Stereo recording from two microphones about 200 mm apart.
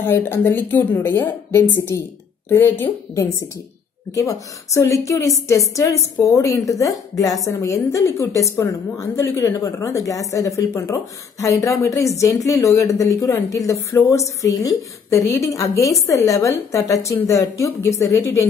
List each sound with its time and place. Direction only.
0.0 s a woman's voice: 10° left (ahead or behind)